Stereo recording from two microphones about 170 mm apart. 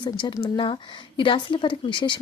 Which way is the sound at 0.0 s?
30° left (ahead or behind).